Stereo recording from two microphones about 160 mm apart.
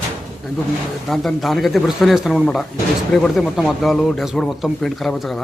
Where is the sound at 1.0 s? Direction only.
Centre (ahead or behind).